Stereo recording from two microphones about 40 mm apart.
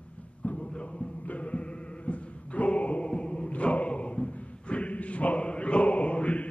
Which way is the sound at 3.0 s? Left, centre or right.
Left.